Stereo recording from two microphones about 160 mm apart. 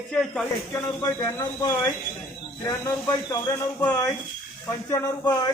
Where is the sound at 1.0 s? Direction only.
20° left (ahead or behind).